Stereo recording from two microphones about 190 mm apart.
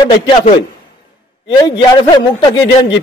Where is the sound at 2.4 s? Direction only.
25° left (ahead or behind).